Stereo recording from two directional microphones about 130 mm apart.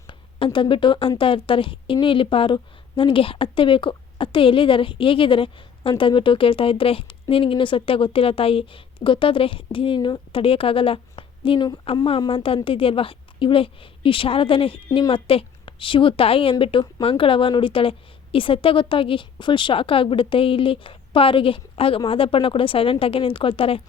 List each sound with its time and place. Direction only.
0.1 s a woman's voice: 40° left (ahead or behind)